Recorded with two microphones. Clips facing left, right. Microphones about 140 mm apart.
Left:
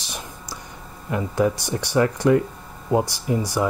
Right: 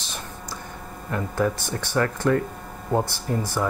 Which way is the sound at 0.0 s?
15° left (ahead or behind).